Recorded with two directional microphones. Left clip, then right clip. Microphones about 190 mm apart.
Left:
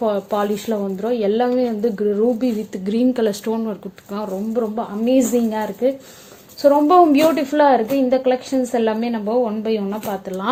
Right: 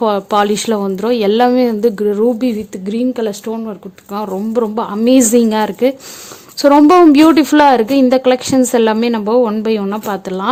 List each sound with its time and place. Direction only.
0.0 s a woman's voice: 45° right (ahead or behind)
2.7 s speech: 20° right (ahead or behind)
4.5 s a woman's voice: 45° right (ahead or behind)